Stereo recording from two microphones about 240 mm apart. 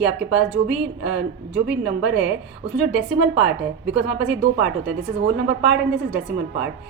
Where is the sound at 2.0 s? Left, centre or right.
Right.